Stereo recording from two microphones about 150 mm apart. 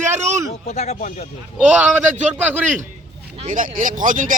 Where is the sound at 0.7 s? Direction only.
50° left (ahead or behind).